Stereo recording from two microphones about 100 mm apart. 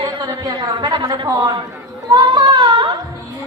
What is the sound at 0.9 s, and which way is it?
Speech, 60° right (ahead or behind).